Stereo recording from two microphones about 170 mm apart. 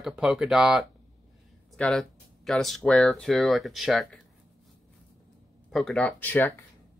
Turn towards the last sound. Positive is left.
turn(degrees=10)  # may be behind; listen again after turning